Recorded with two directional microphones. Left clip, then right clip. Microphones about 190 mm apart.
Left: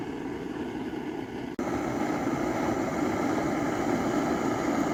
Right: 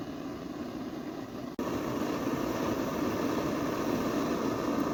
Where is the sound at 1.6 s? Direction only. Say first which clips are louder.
Left 3 dB; 10° left (ahead or behind).